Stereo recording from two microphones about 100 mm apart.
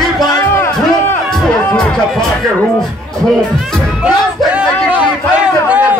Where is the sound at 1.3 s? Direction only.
5° left (ahead or behind).